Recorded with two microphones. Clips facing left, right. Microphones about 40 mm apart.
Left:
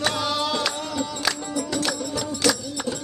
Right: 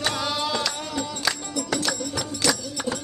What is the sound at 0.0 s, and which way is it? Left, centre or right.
Music, centre.